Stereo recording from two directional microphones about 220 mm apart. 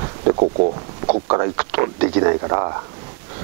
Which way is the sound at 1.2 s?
20° right (ahead or behind).